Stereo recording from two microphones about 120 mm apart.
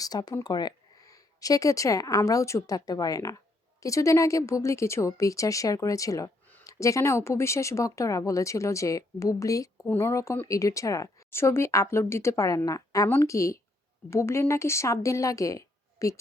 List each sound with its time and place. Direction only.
0.0 s speech: 35° left (ahead or behind)
9.7 s speech: 15° left (ahead or behind)